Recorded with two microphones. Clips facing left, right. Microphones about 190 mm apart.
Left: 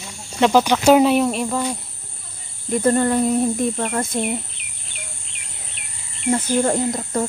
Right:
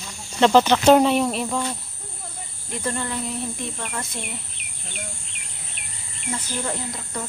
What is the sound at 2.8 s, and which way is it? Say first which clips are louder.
Speech: left 11 dB; 50° left (ahead or behind).